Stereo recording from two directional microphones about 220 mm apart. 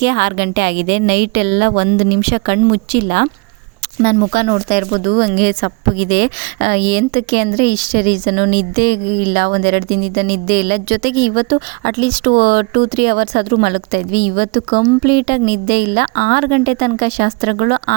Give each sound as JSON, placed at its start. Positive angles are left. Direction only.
{"t": 0.0, "sound": "a woman's voice", "side_deg": -50}